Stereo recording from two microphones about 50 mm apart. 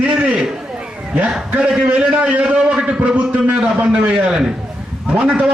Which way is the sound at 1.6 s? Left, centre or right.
Right.